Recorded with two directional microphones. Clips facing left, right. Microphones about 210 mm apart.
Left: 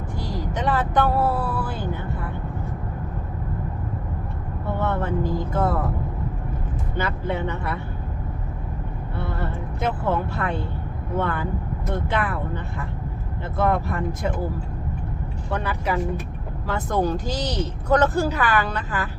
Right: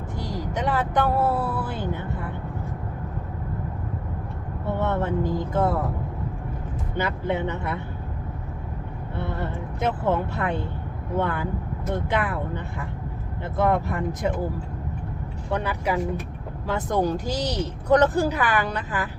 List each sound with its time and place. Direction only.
0.2 s vehicle: 15° right (ahead or behind)
4.8 s speech: 20° right (ahead or behind)
6.9 s speech: 15° right (ahead or behind)
9.2 s speech: 20° right (ahead or behind)
15.4 s speech: 15° right (ahead or behind)